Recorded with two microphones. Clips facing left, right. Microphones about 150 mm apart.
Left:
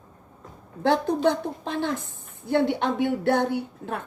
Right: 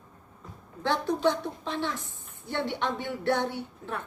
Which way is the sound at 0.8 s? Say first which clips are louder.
Left 5 dB; 40° left (ahead or behind).